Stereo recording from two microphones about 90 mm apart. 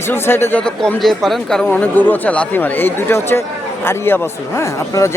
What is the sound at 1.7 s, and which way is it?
Speech, 20° left (ahead or behind).